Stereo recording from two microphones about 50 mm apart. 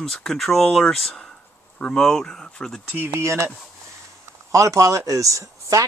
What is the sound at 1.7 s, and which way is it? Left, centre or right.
Speech, left.